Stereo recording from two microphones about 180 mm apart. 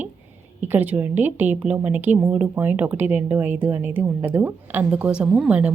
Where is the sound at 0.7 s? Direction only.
10° right (ahead or behind).